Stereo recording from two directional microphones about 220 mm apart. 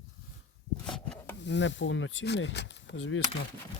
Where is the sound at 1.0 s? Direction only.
5° left (ahead or behind).